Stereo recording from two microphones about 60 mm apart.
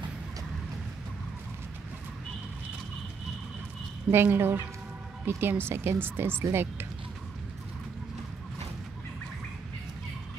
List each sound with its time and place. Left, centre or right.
4.1 s speech: right